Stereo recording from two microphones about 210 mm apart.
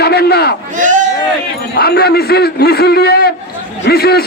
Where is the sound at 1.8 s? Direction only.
50° left (ahead or behind).